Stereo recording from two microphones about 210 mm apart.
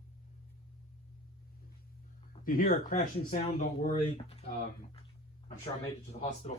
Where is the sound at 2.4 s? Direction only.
40° left (ahead or behind).